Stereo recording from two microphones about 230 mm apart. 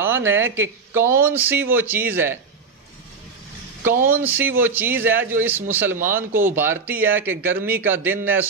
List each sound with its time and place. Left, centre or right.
0.3 s speech: centre
4.1 s speech: centre